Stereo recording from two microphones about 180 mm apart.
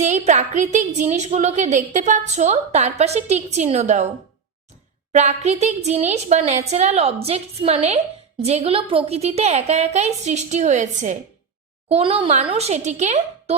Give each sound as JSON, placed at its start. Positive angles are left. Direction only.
{"t": 0.0, "sound": "a woman's voice", "side_deg": -40}
{"t": 5.1, "sound": "a woman's voice", "side_deg": -40}